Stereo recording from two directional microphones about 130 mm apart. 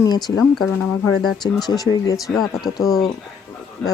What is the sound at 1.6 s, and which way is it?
Speech, 30° left (ahead or behind).